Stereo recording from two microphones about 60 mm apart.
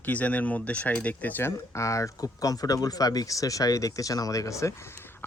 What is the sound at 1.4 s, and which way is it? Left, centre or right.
Speech, left.